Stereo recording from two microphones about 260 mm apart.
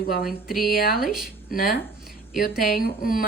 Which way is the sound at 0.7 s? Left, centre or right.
Left.